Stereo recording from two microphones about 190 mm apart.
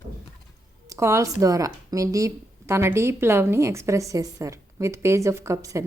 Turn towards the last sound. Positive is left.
turn(degrees=-15)  # may be behind; listen again after turning